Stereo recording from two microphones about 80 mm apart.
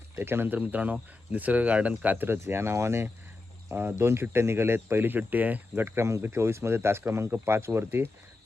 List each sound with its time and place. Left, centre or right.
0.2 s speech: right